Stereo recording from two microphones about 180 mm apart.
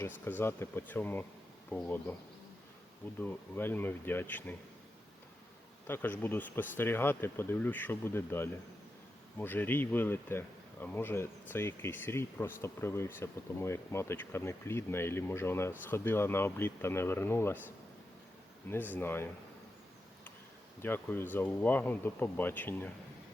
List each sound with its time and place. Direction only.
0.0 s speech: 10° left (ahead or behind)
3.2 s speech: 10° left (ahead or behind)
5.9 s speech: 10° left (ahead or behind)
18.7 s speech: 10° left (ahead or behind)
20.8 s speech: 10° left (ahead or behind)